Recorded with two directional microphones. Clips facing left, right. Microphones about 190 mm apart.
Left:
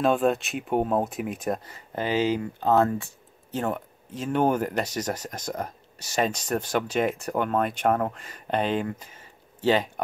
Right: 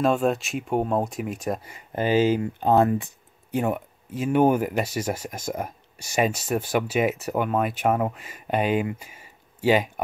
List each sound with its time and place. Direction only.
0.0 s speech: centre (ahead or behind)
1.7 s speech: 15° right (ahead or behind)
9.0 s a sound: 10° right (ahead or behind)